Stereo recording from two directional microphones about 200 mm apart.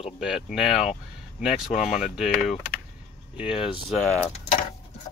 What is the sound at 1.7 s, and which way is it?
Speech, 35° left (ahead or behind).